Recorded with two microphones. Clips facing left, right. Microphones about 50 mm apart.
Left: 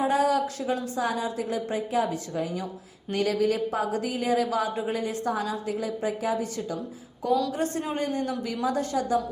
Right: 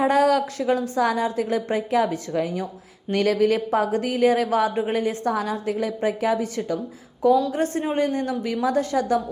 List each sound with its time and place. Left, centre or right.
0.0 s a woman's voice: right
7.5 s a woman's voice: right